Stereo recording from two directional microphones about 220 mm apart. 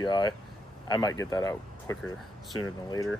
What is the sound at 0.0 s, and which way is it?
Speech, 20° left (ahead or behind).